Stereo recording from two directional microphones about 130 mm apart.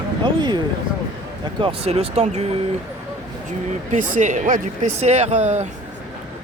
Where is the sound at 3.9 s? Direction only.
75° right (ahead or behind).